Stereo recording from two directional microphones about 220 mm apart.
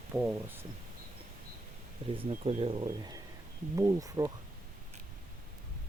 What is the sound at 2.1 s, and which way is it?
Speech, 25° right (ahead or behind).